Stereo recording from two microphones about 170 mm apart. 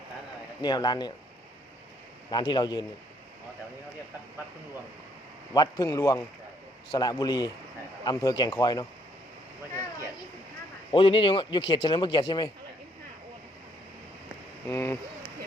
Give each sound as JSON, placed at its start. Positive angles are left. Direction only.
{"t": 0.6, "sound": "speech", "side_deg": 25}
{"t": 2.3, "sound": "speech", "side_deg": 25}
{"t": 5.5, "sound": "speech", "side_deg": 20}
{"t": 10.9, "sound": "speech", "side_deg": 30}
{"t": 14.7, "sound": "speech", "side_deg": 15}